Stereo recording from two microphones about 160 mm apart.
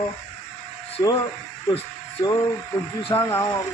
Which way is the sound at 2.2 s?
20° left (ahead or behind).